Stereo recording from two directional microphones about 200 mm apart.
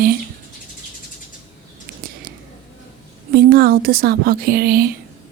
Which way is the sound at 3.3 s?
50° right (ahead or behind).